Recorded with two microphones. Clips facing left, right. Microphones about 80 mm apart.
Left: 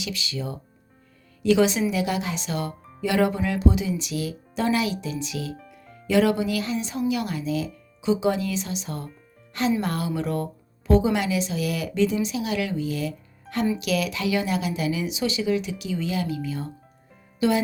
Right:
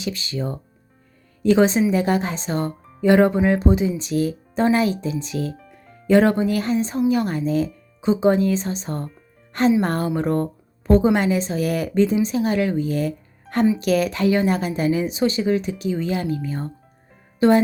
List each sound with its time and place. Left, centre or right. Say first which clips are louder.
0.0 s a woman's voice: right 5 dB; right